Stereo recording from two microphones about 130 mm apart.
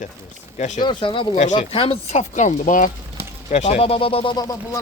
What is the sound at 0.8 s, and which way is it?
A man's voice, 35° left (ahead or behind).